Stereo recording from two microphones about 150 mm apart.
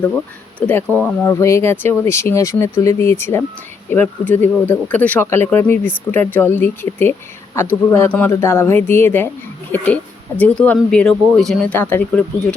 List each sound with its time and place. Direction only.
0.6 s speech: 10° left (ahead or behind)